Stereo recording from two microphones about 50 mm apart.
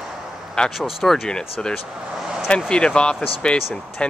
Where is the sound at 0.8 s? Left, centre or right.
Centre.